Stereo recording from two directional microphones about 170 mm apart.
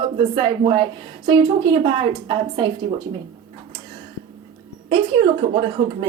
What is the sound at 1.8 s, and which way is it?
Speech, 30° right (ahead or behind).